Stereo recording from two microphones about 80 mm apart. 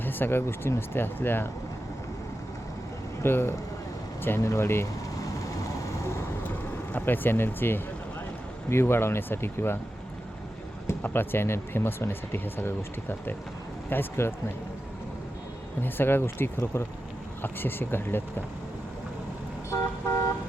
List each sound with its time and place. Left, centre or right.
0.0 s speech: left
3.2 s speech: left
4.4 s speech: left
6.5 s vehicle: left
8.7 s speech: left
11.0 s speech: left
15.8 s speech: left
19.7 s vehicle: left